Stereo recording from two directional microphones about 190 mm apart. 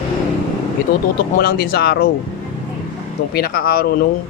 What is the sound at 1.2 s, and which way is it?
Speech, 50° left (ahead or behind).